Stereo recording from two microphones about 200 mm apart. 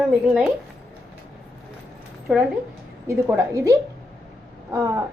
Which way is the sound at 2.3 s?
5° right (ahead or behind).